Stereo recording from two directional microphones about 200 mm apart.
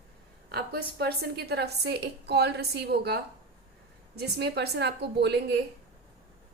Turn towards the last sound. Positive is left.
turn(degrees=-55)  # may be behind; listen again after turning